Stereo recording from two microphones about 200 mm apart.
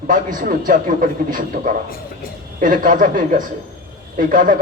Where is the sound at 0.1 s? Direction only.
40° right (ahead or behind).